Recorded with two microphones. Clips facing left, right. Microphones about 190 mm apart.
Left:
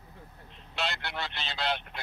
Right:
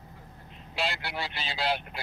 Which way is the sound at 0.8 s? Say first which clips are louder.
Right 2 dB; 10° right (ahead or behind).